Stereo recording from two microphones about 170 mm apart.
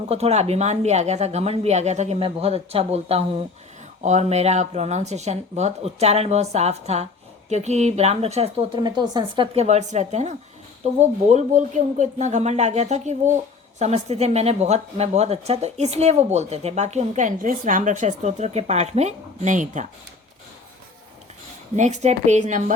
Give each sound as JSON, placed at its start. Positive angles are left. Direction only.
{"t": 0.1, "sound": "a woman's voice", "side_deg": -40}
{"t": 8.8, "sound": "a woman's voice", "side_deg": -25}
{"t": 21.8, "sound": "speech", "side_deg": -45}